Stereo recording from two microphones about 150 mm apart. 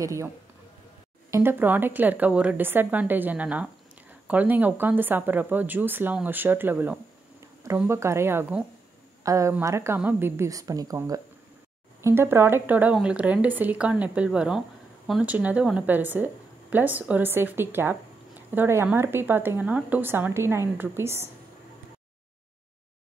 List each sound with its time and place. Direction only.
0.0 s a woman's voice: 20° right (ahead or behind)
1.3 s a woman's voice: 15° right (ahead or behind)